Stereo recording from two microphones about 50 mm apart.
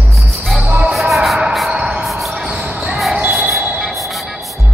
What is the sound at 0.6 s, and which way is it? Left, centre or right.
Music, right.